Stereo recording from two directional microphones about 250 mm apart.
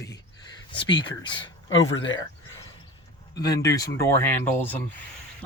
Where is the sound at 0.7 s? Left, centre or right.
Centre.